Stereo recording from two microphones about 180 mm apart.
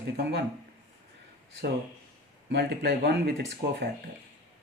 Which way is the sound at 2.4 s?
65° right (ahead or behind).